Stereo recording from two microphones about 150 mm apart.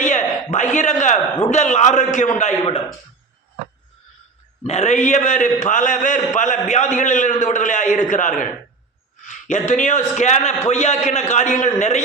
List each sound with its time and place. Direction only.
0.5 s a man's voice: 55° left (ahead or behind)
2.4 s a man's voice: 40° left (ahead or behind)
4.6 s a man's voice: 50° left (ahead or behind)